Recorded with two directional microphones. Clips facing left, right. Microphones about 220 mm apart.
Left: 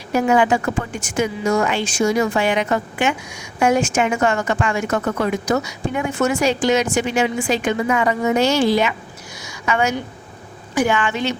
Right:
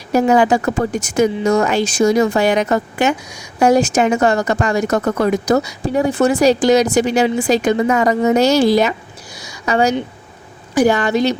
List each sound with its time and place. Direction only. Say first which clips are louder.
0.1 s speech: right 3 dB; 40° right (ahead or behind)